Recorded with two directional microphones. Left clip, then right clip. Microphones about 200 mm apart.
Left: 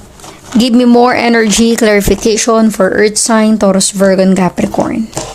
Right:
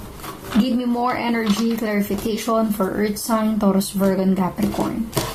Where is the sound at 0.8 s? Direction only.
55° left (ahead or behind).